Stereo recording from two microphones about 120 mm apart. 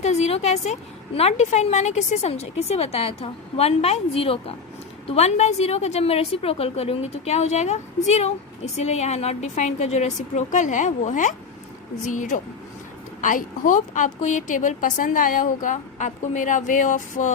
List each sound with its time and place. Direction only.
0.0 s a woman's voice: 65° left (ahead or behind); by 17.3 s 90° left